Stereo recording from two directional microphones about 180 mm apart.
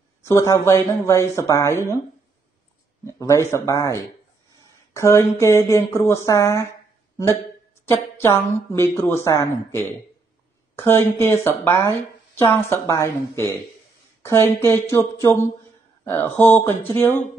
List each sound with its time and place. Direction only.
0.2 s speech: 15° left (ahead or behind)
3.2 s speech: 15° left (ahead or behind)
7.8 s speech: 15° left (ahead or behind)
10.8 s speech: 15° left (ahead or behind)